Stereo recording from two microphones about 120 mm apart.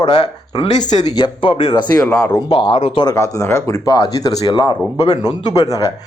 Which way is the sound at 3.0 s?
30° left (ahead or behind).